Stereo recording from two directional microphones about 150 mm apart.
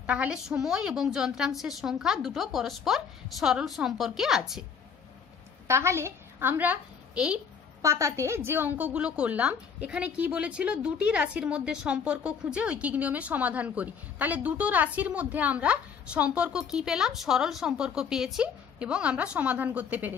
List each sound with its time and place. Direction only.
0.0 s a woman's voice: 10° right (ahead or behind)
5.7 s a woman's voice: 20° right (ahead or behind)
7.8 s a woman's voice: 20° right (ahead or behind)